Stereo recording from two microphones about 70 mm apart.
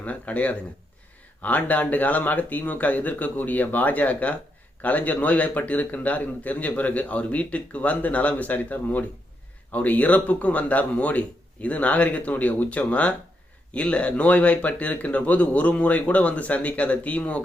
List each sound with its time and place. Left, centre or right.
0.0 s a man's voice: left